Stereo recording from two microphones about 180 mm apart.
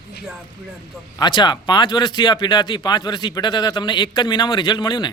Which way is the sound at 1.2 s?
25° left (ahead or behind).